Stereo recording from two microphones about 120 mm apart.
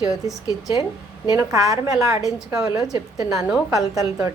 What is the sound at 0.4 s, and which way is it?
Speech, 40° left (ahead or behind).